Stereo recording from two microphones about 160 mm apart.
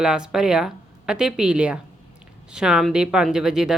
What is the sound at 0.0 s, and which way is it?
A woman's voice, 5° right (ahead or behind).